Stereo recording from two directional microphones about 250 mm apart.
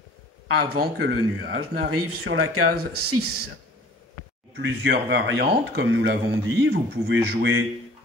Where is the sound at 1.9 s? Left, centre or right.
Right.